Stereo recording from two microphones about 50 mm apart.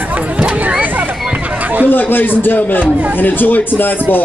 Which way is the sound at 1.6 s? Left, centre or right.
Right.